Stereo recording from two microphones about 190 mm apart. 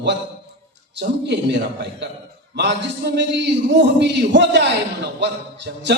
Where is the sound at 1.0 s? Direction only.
65° right (ahead or behind).